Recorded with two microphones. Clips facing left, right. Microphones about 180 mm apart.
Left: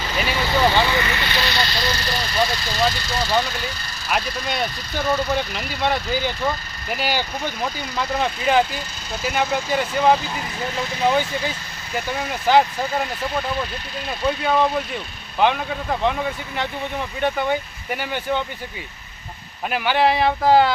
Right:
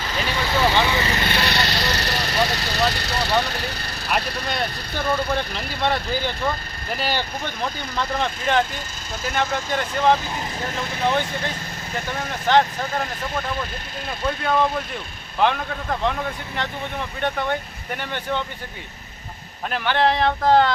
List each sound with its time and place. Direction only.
0.2 s vehicle: 10° left (ahead or behind)
1.1 s vehicle: 50° right (ahead or behind)
3.4 s speech: 65° right (ahead or behind)
4.4 s speech: centre (ahead or behind)
14.1 s speech: 5° left (ahead or behind)
19.6 s speech: 5° left (ahead or behind)